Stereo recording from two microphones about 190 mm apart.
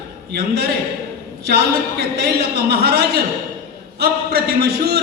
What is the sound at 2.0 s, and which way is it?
Music, 55° right (ahead or behind).